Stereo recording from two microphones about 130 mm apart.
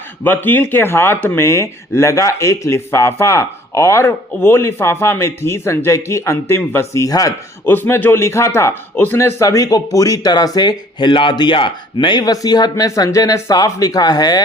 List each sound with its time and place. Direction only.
0.3 s speech: 15° left (ahead or behind)
7.6 s speech: 15° left (ahead or behind)